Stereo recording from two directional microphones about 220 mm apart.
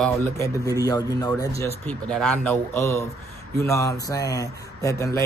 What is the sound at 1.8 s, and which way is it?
A man's voice, 5° left (ahead or behind).